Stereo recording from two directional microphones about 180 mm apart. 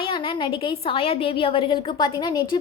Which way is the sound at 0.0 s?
25° left (ahead or behind).